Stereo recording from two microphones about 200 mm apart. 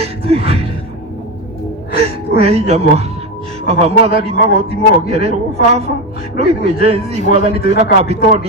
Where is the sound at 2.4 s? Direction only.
30° right (ahead or behind).